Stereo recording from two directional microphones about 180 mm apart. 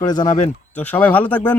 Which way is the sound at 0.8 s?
10° left (ahead or behind).